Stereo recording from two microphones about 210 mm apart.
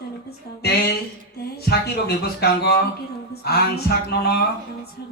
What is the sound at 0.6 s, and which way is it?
Speech, 50° left (ahead or behind).